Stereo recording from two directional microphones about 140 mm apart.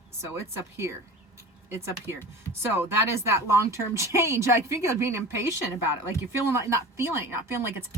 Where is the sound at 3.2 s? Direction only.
20° right (ahead or behind).